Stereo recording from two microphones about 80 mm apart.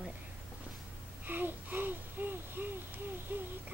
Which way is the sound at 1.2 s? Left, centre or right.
Right.